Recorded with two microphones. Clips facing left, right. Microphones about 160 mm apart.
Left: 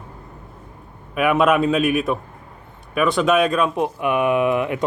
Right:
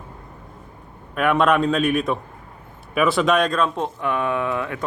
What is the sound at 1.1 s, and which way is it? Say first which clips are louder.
A man's voice: left 1 dB; 5° left (ahead or behind).